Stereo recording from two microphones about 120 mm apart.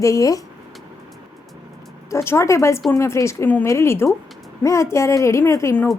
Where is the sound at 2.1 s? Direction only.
20° left (ahead or behind).